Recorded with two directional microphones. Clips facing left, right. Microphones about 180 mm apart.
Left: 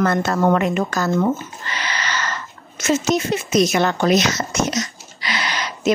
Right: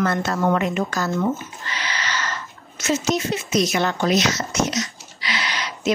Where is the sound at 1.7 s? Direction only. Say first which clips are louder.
Left 2 dB; 50° left (ahead or behind).